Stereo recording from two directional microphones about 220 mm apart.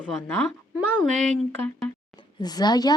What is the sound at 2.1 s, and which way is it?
Speech, 20° left (ahead or behind).